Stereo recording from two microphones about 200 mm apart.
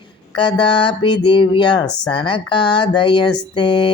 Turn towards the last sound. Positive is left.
turn(degrees=25)  # may be behind; listen again after turning